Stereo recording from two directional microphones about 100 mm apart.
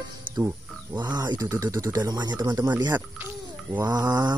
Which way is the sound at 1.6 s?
35° right (ahead or behind).